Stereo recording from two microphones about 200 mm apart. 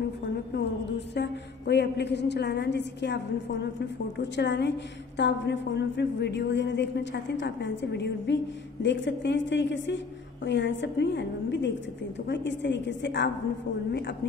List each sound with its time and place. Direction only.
0.5 s a woman's voice: 60° left (ahead or behind)